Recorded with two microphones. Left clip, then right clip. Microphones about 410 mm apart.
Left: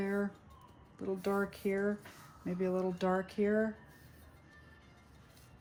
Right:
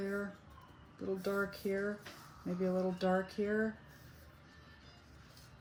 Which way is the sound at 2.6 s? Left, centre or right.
Left.